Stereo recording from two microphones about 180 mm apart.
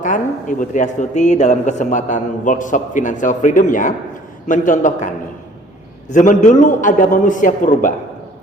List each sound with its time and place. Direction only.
0.0 s a man's voice: 45° left (ahead or behind)
6.1 s a man's voice: 45° left (ahead or behind)